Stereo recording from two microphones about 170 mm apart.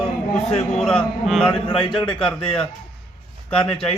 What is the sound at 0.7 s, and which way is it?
Speech, centre (ahead or behind).